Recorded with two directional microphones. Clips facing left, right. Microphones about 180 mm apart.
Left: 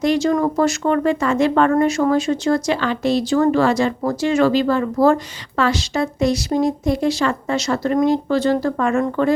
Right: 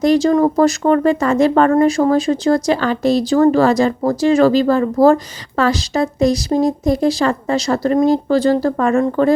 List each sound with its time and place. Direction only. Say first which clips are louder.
0.0 s speech: right 4 dB; 40° right (ahead or behind)